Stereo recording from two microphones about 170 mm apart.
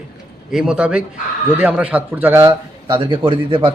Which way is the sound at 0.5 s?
5° right (ahead or behind).